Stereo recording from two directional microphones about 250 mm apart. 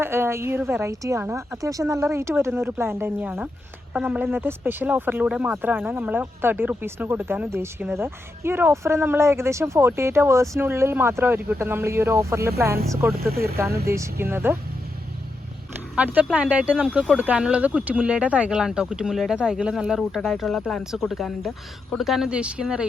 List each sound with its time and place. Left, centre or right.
0.0 s speech: centre
13.3 s speech: right
13.9 s speech: centre
16.0 s speech: centre